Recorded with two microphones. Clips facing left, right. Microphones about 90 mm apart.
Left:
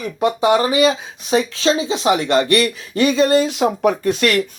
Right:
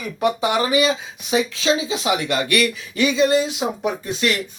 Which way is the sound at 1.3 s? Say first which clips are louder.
Left 3 dB; 35° left (ahead or behind).